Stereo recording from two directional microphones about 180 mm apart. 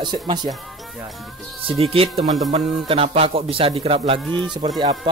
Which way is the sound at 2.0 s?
30° right (ahead or behind).